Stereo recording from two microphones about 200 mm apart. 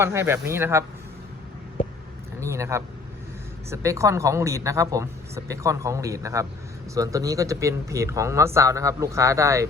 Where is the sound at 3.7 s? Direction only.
15° right (ahead or behind).